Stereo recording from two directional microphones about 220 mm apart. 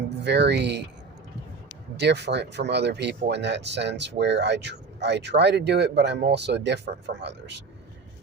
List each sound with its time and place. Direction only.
0.3 s speech: 50° right (ahead or behind)
2.0 s speech: 50° right (ahead or behind)